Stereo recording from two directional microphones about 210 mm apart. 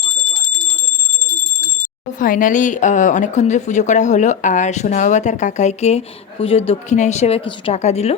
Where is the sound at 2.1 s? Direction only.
40° left (ahead or behind).